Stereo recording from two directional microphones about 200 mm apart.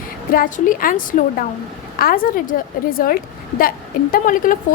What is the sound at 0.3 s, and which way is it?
Speech, 45° left (ahead or behind).